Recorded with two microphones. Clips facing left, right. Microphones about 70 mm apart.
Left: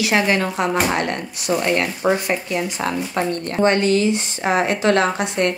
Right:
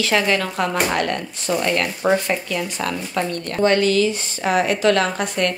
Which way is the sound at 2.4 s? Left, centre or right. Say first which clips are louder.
Left 2 dB; left.